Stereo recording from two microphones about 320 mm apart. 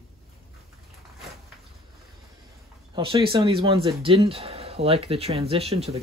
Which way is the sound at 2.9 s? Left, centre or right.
Centre.